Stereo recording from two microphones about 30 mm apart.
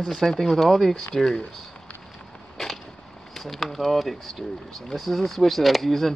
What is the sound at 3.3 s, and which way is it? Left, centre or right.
Speech, centre.